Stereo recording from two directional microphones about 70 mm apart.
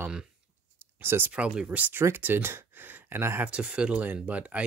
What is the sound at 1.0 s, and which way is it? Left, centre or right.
Speech, right.